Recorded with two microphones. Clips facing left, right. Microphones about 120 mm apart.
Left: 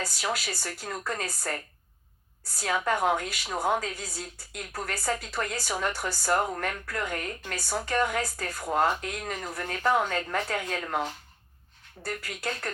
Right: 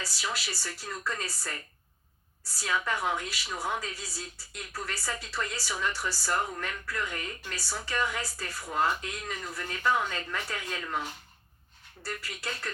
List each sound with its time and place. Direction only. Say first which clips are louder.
0.0 s a woman's voice: left 4 dB; 50° left (ahead or behind)